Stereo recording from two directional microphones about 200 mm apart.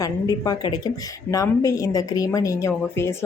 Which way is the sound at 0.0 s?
20° left (ahead or behind).